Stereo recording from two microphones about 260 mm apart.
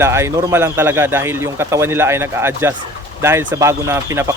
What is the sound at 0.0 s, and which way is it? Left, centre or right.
Speech, centre.